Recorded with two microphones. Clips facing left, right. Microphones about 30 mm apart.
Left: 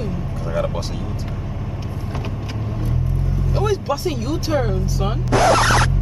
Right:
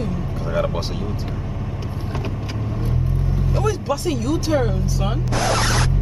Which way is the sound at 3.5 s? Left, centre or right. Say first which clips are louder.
Left 2 dB; centre.